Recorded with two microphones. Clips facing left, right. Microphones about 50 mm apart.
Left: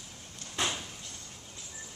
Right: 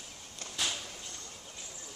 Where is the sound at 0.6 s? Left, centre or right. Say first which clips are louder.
Left 3 dB; left.